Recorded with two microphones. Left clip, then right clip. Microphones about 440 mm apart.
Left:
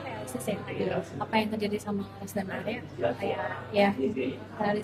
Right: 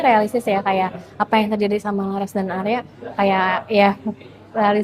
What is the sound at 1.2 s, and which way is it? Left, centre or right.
A woman's voice, right.